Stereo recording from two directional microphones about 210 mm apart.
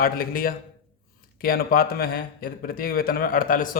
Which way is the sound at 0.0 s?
45° left (ahead or behind).